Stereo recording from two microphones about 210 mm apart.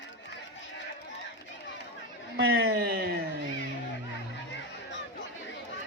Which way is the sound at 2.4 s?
75° right (ahead or behind).